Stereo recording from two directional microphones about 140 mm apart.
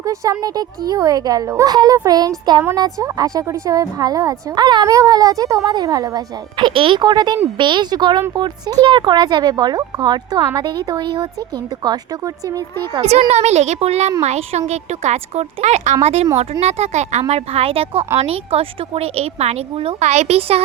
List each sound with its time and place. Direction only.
0.0 s speech: 25° right (ahead or behind)
12.9 s speech: 45° right (ahead or behind)